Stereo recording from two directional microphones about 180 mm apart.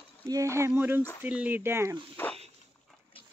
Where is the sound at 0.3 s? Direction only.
15° right (ahead or behind).